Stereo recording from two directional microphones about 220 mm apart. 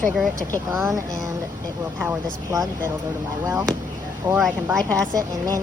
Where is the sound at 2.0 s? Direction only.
10° right (ahead or behind).